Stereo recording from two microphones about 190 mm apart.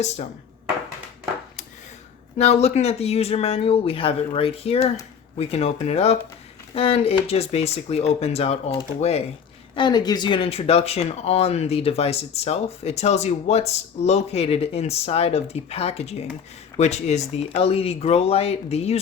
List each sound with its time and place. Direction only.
2.4 s speech: 35° left (ahead or behind)
9.7 s speech: 20° left (ahead or behind)